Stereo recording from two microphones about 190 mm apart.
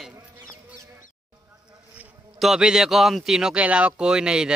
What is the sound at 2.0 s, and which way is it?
Speech, 5° right (ahead or behind).